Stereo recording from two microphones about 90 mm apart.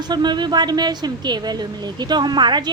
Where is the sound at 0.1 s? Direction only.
55° right (ahead or behind).